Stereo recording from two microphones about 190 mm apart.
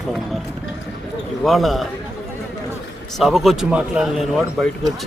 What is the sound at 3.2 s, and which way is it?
Speech, centre (ahead or behind).